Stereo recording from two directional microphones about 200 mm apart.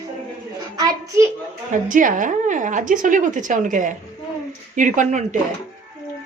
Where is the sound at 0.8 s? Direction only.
20° right (ahead or behind).